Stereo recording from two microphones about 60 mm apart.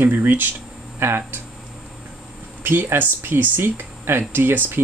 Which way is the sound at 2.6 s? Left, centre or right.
Right.